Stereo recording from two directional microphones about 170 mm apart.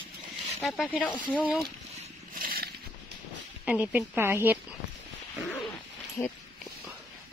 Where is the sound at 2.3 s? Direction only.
60° right (ahead or behind).